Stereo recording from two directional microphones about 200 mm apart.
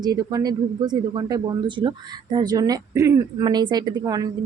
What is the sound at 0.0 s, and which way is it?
Speech, 20° right (ahead or behind).